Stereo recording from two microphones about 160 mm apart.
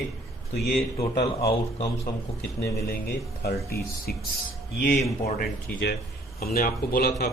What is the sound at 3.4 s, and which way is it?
Speech, 75° left (ahead or behind).